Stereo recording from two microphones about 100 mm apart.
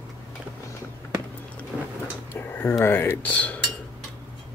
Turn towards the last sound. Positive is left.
turn(degrees=15)  # may be behind; listen again after turning